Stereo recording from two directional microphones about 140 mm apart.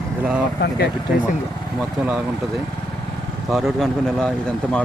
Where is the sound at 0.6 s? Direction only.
90° left.